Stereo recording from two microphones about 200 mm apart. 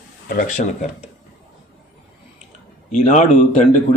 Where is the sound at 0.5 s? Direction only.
35° left (ahead or behind).